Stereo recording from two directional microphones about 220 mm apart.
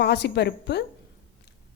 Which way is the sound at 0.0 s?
50° left (ahead or behind).